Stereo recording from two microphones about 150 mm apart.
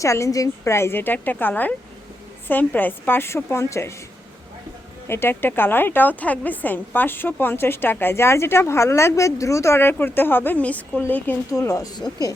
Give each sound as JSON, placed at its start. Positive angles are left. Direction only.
{"t": 0.0, "sound": "a woman's voice", "side_deg": 20}
{"t": 5.0, "sound": "a woman's voice", "side_deg": 15}